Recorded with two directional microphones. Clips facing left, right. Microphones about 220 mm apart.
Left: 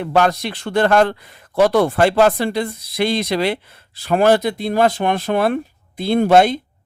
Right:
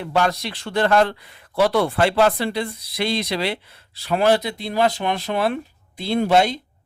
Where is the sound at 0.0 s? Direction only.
50° left (ahead or behind).